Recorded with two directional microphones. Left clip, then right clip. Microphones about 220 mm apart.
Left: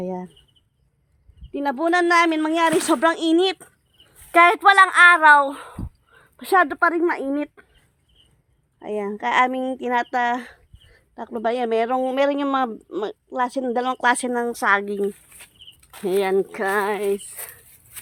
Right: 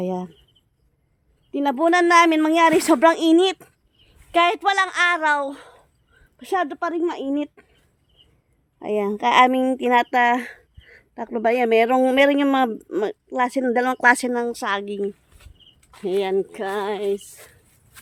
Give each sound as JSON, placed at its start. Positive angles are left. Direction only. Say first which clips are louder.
{"t": 0.0, "sound": "speech", "louder": "right 3 dB", "side_deg": -35}
{"t": 1.5, "sound": "a woman's voice", "louder": "right 2 dB", "side_deg": -25}
{"t": 4.3, "sound": "speech", "louder": "left 5 dB", "side_deg": 5}
{"t": 7.6, "sound": "a sound", "louder": "left 2 dB", "side_deg": -20}
{"t": 8.8, "sound": "speech", "louder": "right 4 dB", "side_deg": -35}
{"t": 14.3, "sound": "a woman's voice", "louder": "left 3 dB", "side_deg": -10}
{"t": 18.0, "sound": "a sound", "louder": "left 4 dB", "side_deg": 50}